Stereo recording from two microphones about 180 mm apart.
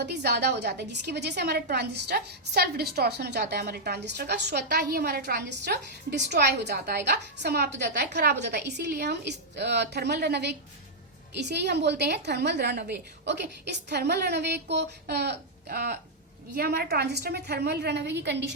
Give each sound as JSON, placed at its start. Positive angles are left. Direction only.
{"t": 0.0, "sound": "a woman's voice", "side_deg": -65}